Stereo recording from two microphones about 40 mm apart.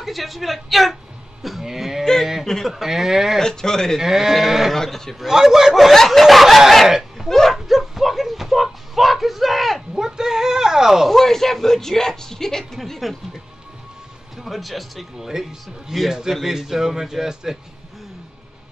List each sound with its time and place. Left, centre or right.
0.0 s a man's voice: centre
2.4 s speech: centre
2.7 s a man's voice: centre
3.3 s speech: centre
4.0 s a man's voice: centre
4.7 s speech: centre
5.2 s a man's voice: centre
7.2 s dog: centre
7.5 s a sound: centre
9.9 s speech: centre
11.1 s speech: centre
14.3 s a man's voice: centre